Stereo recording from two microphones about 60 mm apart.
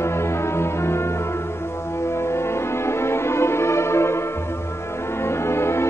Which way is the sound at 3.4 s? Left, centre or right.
Left.